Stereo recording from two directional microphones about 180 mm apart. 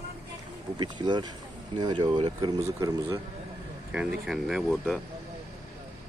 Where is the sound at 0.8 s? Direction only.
25° right (ahead or behind).